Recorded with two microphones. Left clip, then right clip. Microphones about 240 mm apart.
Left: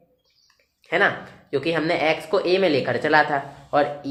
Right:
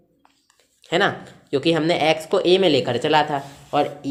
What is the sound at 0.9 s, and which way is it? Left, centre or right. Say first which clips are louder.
Speech: even; right.